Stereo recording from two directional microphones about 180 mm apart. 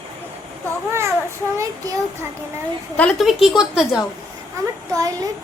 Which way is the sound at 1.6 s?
15° right (ahead or behind).